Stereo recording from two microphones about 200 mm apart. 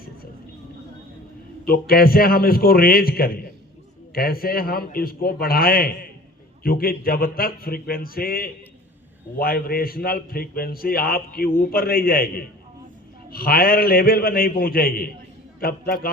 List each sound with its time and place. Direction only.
1.6 s a man's voice: 45° left (ahead or behind)